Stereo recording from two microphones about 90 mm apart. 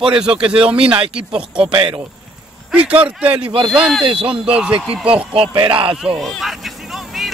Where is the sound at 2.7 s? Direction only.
15° right (ahead or behind).